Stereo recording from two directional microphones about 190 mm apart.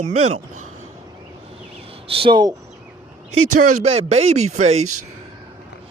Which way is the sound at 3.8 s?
35° right (ahead or behind).